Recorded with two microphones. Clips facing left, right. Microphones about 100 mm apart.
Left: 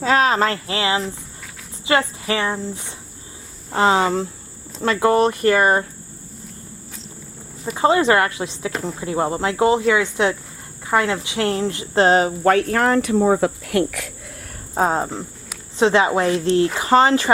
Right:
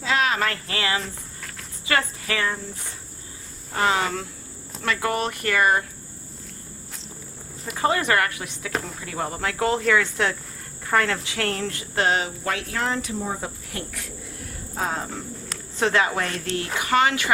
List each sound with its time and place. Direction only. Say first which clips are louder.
0.0 s speech: left 6 dB; 40° left (ahead or behind)
3.7 s speech: left 6 dB; 25° left (ahead or behind)
7.8 s speech: left 6 dB; 25° left (ahead or behind)
12.0 s speech: left 8 dB; 35° left (ahead or behind)
12.5 s speech: left 11 dB; 50° left (ahead or behind); by 14.1 s 85° left
14.8 s speech: left 9 dB; 40° left (ahead or behind)
15.8 s speech: left 6 dB; 20° left (ahead or behind)